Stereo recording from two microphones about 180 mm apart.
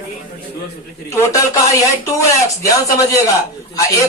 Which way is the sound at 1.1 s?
20° left (ahead or behind).